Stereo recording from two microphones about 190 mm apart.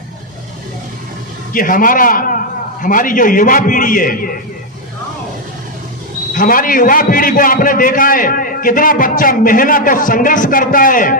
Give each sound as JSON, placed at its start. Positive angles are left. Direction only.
{"t": 1.5, "sound": "a man's voice", "side_deg": 45}
{"t": 6.3, "sound": "a man's voice", "side_deg": 45}